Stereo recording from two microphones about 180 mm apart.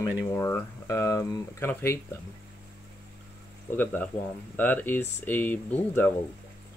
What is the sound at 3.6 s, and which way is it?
Speech, 10° left (ahead or behind).